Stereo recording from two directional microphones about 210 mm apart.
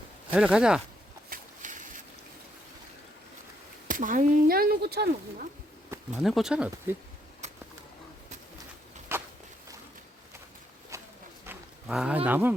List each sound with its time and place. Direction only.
0.3 s speech: 5° right (ahead or behind)
1.3 s a sound: 40° right (ahead or behind)
3.8 s speech: 40° right (ahead or behind)
6.1 s speech: centre (ahead or behind)
7.4 s bird: 35° right (ahead or behind)
9.1 s walk: 10° right (ahead or behind)
10.9 s a sound: 15° right (ahead or behind)